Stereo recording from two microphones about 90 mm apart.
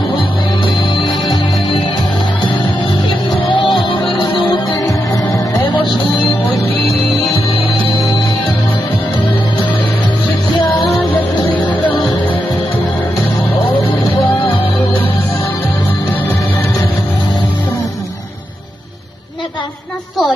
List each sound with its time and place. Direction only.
0.2 s music: 70° left (ahead or behind)
3.5 s music: 70° left (ahead or behind)
4.8 s music: 45° left (ahead or behind)
5.3 s music: 55° left (ahead or behind)
7.3 s music: 75° left (ahead or behind)
11.5 s music: 15° left (ahead or behind)